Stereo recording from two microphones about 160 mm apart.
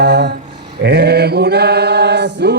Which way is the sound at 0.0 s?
90° right.